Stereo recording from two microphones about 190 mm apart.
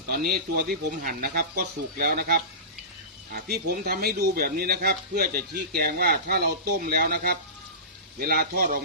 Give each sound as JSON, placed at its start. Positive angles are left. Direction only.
{"t": 0.3, "sound": "a man's voice", "side_deg": -55}